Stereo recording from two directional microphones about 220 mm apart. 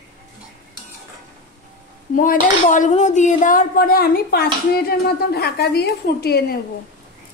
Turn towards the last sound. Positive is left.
turn(degrees=45)  # may be behind; listen again after turning